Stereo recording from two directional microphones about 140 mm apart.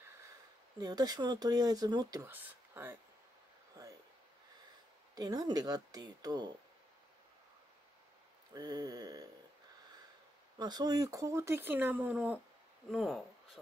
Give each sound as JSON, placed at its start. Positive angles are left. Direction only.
{"t": 0.7, "sound": "speech", "side_deg": -30}
{"t": 2.3, "sound": "speech", "side_deg": -15}
{"t": 5.1, "sound": "speech", "side_deg": -30}
{"t": 8.5, "sound": "speech", "side_deg": -30}
{"t": 10.6, "sound": "speech", "side_deg": -30}